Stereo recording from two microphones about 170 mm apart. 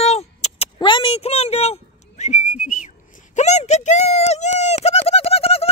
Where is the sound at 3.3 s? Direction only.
40° left (ahead or behind).